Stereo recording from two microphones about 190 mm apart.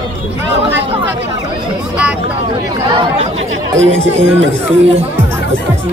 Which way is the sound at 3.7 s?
85° right.